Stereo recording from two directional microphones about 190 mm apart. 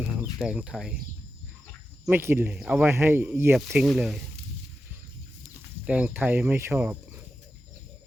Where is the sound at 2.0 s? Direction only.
15° right (ahead or behind).